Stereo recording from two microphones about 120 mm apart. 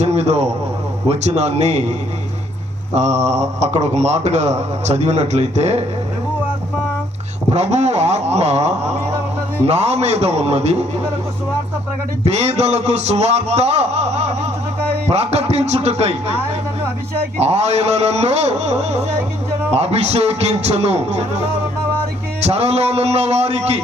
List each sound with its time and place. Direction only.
0.0 s a man's voice: 60° right (ahead or behind)
2.9 s speech: 70° right (ahead or behind)
7.5 s a man's voice: 70° right (ahead or behind)
12.2 s a man's voice: 65° right (ahead or behind)
14.8 s music: 15° left (ahead or behind)
15.1 s a man's voice: 60° right (ahead or behind)
22.4 s a man's voice: 60° right (ahead or behind)